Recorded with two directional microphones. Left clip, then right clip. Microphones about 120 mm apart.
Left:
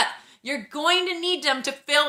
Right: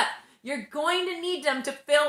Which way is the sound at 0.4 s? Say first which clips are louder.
Left 4 dB; 20° left (ahead or behind).